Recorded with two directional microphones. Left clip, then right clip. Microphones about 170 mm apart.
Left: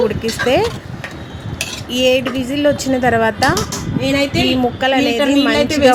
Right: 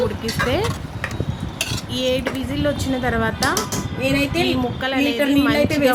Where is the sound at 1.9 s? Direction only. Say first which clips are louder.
Left 8 dB; 25° left (ahead or behind).